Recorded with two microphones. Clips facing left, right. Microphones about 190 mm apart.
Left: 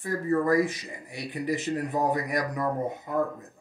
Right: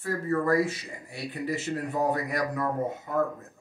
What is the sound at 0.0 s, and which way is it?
Speech, 15° left (ahead or behind).